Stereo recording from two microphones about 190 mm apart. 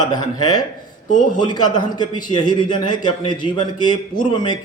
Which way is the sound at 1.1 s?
40° left (ahead or behind).